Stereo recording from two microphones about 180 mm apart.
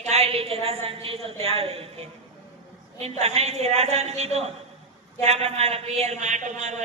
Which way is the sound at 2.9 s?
35° right (ahead or behind).